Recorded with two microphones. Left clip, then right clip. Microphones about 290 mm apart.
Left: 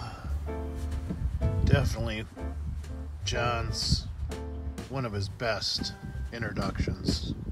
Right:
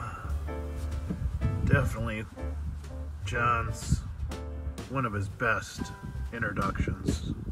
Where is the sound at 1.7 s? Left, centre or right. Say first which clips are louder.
Right 1 dB; centre.